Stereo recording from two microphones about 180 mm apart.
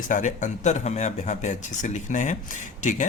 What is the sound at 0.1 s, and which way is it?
Speech, 45° left (ahead or behind).